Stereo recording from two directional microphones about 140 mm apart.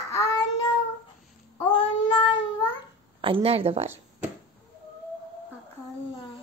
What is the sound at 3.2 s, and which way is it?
Speech, 40° right (ahead or behind).